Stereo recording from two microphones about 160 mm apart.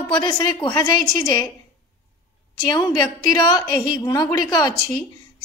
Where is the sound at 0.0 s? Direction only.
30° left (ahead or behind).